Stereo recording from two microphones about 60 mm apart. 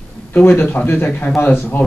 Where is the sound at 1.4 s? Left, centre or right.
Left.